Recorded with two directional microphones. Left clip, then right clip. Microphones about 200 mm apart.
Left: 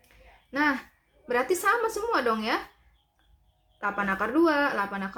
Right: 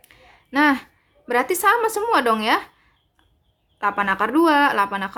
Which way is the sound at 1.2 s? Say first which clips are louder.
Right 7 dB; 35° right (ahead or behind).